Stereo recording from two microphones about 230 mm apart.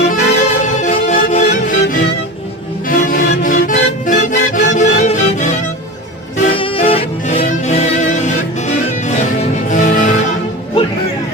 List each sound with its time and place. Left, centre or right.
0.0 s music: left
6.5 s music: left